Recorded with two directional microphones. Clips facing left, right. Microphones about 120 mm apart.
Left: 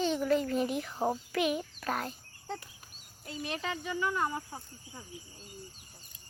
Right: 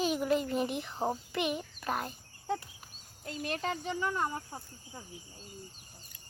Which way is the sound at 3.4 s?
45° right (ahead or behind).